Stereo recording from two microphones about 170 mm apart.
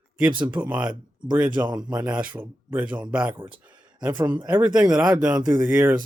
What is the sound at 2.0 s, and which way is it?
A man's voice, 5° right (ahead or behind).